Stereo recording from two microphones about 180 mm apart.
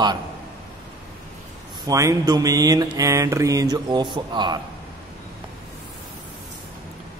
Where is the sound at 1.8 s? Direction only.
20° right (ahead or behind).